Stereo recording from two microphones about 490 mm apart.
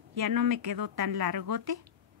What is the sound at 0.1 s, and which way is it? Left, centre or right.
A woman's voice, right.